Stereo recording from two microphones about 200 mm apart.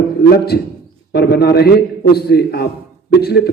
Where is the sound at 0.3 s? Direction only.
55° left (ahead or behind).